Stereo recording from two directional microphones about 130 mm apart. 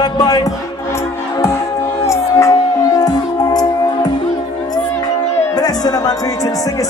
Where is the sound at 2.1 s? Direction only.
25° left (ahead or behind).